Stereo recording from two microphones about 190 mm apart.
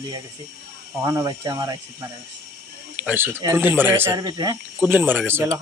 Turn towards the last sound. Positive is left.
turn(degrees=-10)  # may be behind; listen again after turning